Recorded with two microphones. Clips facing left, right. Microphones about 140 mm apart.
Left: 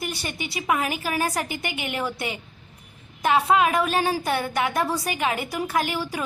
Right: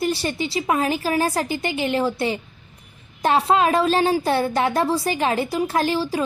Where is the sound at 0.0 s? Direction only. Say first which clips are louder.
Right 8 dB; 30° right (ahead or behind).